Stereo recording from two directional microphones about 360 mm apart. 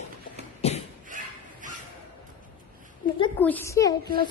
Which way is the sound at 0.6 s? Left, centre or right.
Centre.